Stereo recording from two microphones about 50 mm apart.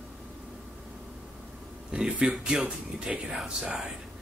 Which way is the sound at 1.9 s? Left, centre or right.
Centre.